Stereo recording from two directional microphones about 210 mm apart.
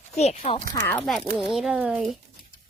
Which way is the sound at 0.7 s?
10° left (ahead or behind).